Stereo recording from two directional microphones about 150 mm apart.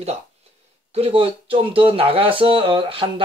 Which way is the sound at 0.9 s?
40° right (ahead or behind).